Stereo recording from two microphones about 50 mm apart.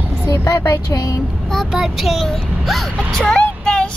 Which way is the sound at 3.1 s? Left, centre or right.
Centre.